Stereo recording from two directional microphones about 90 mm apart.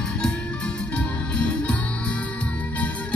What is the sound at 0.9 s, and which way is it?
Music, 15° left (ahead or behind).